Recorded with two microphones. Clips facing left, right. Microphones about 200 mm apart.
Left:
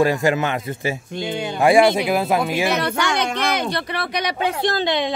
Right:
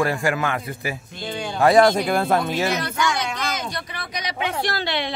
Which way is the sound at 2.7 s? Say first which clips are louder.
Left 3 dB; 65° left (ahead or behind).